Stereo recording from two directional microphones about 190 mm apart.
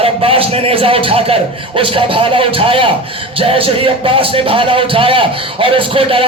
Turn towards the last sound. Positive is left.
turn(degrees=-30)  # may be behind; listen again after turning